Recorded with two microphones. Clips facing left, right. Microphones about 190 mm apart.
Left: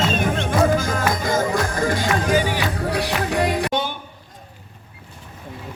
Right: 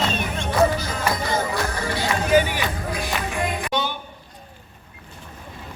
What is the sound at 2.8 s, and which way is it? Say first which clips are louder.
Music: left 5 dB; 70° left (ahead or behind).